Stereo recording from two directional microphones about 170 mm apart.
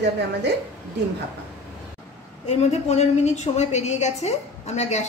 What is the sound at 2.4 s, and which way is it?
A woman's voice, 40° left (ahead or behind).